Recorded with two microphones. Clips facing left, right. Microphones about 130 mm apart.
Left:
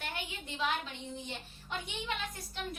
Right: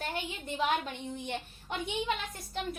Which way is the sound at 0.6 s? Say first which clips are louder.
Right 3 dB; 55° right (ahead or behind).